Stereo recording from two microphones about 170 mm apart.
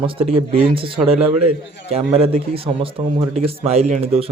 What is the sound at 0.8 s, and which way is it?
Speech, 30° right (ahead or behind).